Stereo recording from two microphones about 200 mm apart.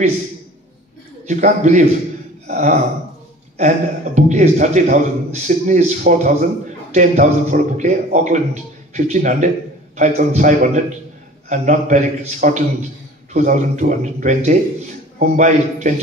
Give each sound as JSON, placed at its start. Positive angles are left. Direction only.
{"t": 1.2, "sound": "a man's voice", "side_deg": -35}
{"t": 2.4, "sound": "throat clearing", "side_deg": -35}
{"t": 3.5, "sound": "a man's voice", "side_deg": -35}